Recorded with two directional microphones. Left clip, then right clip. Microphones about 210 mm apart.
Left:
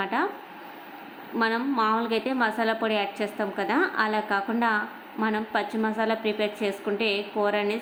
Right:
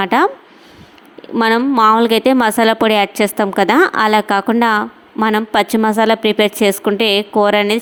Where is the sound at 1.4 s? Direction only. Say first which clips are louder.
Right 13 dB; 50° right (ahead or behind).